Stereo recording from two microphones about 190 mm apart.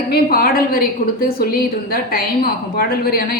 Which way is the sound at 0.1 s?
50° left (ahead or behind).